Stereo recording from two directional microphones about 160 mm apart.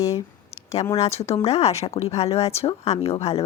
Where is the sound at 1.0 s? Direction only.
40° left (ahead or behind).